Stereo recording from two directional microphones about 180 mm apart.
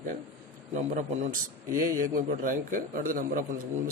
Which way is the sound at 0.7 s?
40° right (ahead or behind).